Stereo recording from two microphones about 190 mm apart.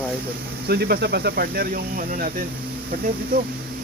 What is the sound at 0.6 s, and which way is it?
Speech, 55° right (ahead or behind).